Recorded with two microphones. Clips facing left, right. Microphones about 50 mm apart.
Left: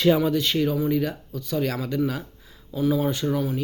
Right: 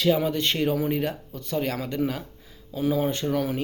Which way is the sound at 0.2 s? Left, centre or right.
Right.